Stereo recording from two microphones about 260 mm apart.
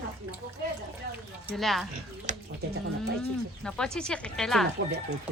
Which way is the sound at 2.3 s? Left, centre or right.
Right.